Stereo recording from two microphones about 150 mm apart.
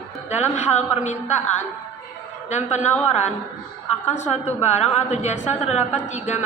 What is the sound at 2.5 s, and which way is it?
Speech, 50° left (ahead or behind).